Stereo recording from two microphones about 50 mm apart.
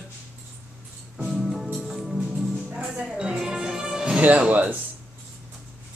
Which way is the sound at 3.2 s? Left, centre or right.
Centre.